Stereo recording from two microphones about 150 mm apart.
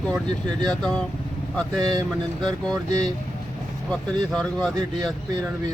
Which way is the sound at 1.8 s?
25° right (ahead or behind).